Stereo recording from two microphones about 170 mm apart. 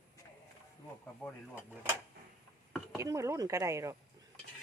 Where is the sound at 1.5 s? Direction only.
10° right (ahead or behind).